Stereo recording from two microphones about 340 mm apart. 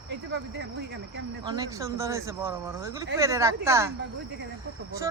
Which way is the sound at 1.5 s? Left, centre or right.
Centre.